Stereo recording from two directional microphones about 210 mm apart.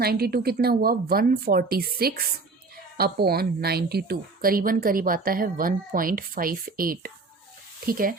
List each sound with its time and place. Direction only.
0.0 s a woman's voice: 45° right (ahead or behind)